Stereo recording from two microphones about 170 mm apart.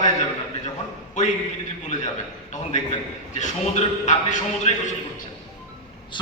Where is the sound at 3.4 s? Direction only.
45° left (ahead or behind).